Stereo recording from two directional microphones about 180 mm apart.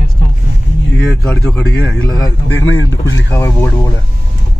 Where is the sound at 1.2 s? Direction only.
5° left (ahead or behind).